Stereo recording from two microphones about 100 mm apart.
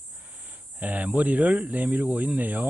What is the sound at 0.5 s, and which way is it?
Speech, 15° right (ahead or behind).